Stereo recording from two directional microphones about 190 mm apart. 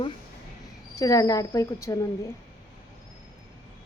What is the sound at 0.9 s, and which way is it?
A woman's voice, 15° left (ahead or behind).